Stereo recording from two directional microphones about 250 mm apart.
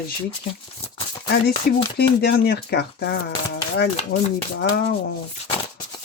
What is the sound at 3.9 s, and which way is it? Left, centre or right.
Speech, left.